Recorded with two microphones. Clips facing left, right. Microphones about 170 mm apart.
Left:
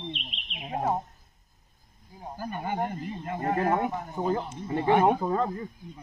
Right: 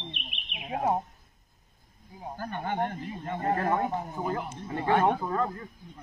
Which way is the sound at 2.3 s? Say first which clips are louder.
Even; 10° left (ahead or behind).